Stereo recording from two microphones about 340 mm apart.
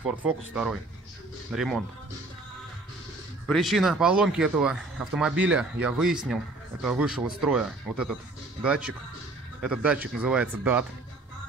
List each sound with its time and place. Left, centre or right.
1.5 s speech: centre
3.4 s speech: centre